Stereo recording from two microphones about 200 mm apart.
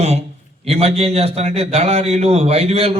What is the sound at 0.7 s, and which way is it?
A man's voice, 30° right (ahead or behind).